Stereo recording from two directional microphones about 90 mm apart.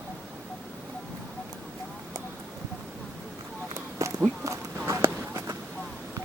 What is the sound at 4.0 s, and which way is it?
Run, 35° right (ahead or behind).